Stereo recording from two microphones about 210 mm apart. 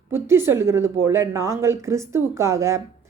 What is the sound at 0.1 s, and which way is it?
A woman's voice, 10° right (ahead or behind).